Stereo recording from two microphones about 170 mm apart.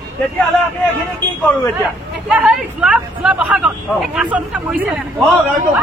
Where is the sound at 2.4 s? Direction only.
5° right (ahead or behind).